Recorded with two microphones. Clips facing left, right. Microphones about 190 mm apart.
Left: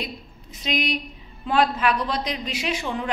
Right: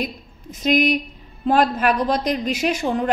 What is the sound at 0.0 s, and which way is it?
A woman's voice, 45° right (ahead or behind).